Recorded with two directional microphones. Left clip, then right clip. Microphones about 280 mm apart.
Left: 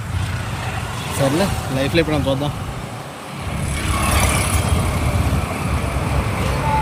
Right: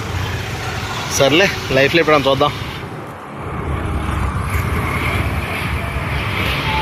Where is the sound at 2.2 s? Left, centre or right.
Centre.